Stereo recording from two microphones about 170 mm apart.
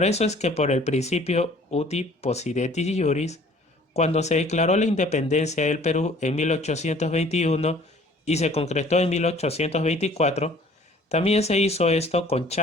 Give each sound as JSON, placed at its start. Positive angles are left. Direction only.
{"t": 0.0, "sound": "speech", "side_deg": 40}